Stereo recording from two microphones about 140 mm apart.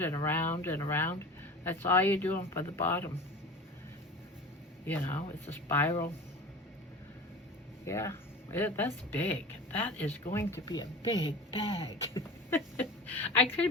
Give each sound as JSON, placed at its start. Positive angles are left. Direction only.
{"t": 0.0, "sound": "a man's voice", "side_deg": 20}
{"t": 4.9, "sound": "a man's voice", "side_deg": 15}
{"t": 7.9, "sound": "speech", "side_deg": 20}
{"t": 11.1, "sound": "speech", "side_deg": 40}
{"t": 12.5, "sound": "speech", "side_deg": 15}